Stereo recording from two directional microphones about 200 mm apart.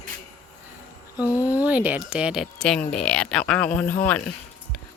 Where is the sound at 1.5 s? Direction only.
10° right (ahead or behind).